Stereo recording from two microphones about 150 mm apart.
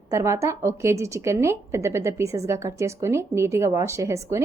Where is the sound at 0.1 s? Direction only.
20° right (ahead or behind).